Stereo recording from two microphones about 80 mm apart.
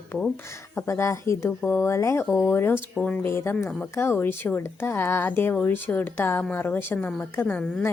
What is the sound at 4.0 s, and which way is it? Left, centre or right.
Speech, left.